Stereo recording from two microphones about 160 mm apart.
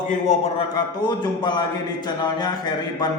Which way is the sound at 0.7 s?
25° left (ahead or behind).